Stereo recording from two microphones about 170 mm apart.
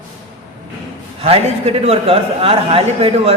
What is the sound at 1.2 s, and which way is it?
A man's voice, 35° right (ahead or behind).